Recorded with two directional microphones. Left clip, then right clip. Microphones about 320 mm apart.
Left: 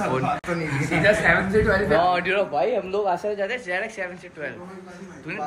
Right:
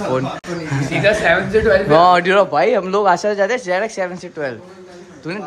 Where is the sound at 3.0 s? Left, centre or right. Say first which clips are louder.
Right 9 dB; right.